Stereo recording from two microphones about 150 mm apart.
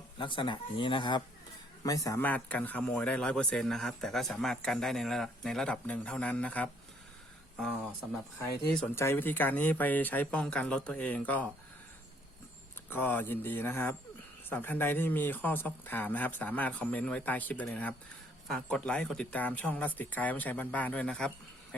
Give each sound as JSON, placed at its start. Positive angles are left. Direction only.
{"t": 0.2, "sound": "a man's voice", "side_deg": 35}
{"t": 2.2, "sound": "speech", "side_deg": 10}
{"t": 9.0, "sound": "speech", "side_deg": 15}
{"t": 12.9, "sound": "speech", "side_deg": 15}